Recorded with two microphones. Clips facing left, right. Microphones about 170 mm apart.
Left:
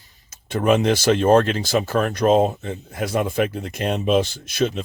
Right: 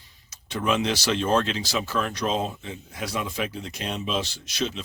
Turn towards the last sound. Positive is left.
turn(degrees=50)  # may be behind; listen again after turning